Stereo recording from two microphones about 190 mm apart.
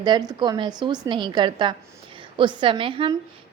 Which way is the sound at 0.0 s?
25° right (ahead or behind).